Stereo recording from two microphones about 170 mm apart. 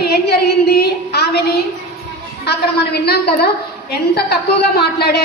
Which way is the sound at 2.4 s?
70° left (ahead or behind).